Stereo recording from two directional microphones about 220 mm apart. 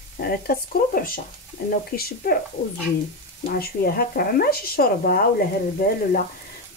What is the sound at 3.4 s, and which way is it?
Speech, 45° left (ahead or behind).